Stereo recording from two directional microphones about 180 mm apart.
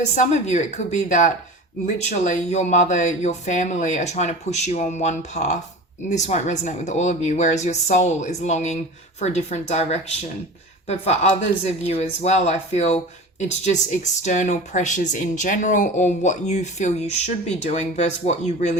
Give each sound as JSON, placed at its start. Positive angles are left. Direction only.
{"t": 0.1, "sound": "speech", "side_deg": 40}